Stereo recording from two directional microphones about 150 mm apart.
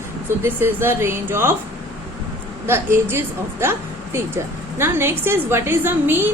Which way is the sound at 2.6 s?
15° right (ahead or behind).